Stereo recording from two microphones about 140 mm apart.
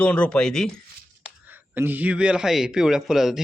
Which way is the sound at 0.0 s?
10° left (ahead or behind).